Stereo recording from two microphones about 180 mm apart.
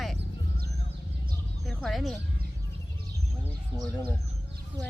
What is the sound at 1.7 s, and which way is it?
Speech, centre (ahead or behind).